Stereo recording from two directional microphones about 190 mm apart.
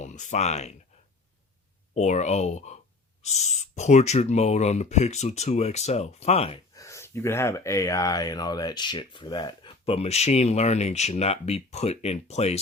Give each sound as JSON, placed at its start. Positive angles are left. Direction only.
{"t": 0.0, "sound": "speech", "side_deg": 40}
{"t": 2.0, "sound": "speech", "side_deg": 35}
{"t": 6.7, "sound": "speech", "side_deg": 15}